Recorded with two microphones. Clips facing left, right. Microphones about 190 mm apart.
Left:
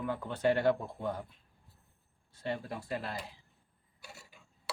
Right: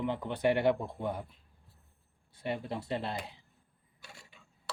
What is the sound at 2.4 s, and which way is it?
Speech, 20° right (ahead or behind).